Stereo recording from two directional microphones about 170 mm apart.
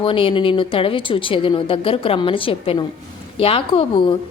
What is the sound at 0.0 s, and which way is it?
A woman's voice, 30° left (ahead or behind).